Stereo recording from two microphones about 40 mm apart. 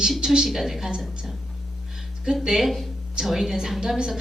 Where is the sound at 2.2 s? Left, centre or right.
Centre.